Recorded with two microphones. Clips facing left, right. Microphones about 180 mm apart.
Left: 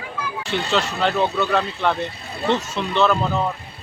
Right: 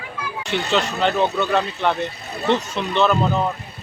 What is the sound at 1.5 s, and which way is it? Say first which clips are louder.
Speech: right 1 dB; 5° right (ahead or behind).